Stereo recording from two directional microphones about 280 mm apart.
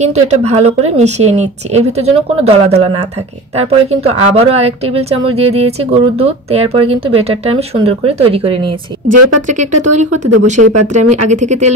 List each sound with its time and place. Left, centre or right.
0.0 s speech: right
3.5 s speech: right
9.1 s speech: right
9.5 s speech: right